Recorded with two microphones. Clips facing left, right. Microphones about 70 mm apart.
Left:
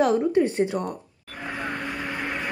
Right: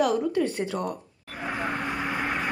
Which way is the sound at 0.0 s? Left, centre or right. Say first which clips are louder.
Left 3 dB; left.